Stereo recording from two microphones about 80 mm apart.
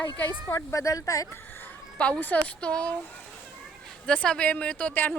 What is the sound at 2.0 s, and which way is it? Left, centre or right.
Speech, centre.